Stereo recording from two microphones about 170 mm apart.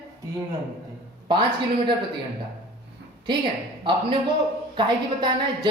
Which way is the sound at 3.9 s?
25° right (ahead or behind).